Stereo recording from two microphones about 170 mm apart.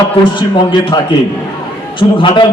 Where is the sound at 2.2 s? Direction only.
25° left (ahead or behind).